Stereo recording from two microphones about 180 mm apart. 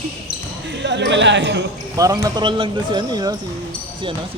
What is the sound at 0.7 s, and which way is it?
Speech, 75° right (ahead or behind).